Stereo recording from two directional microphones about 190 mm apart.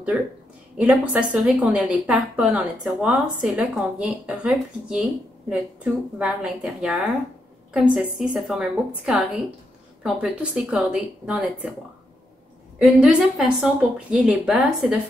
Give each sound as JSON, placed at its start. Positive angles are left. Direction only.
{"t": 0.1, "sound": "a woman's voice", "side_deg": -5}
{"t": 12.7, "sound": "a woman's voice", "side_deg": 0}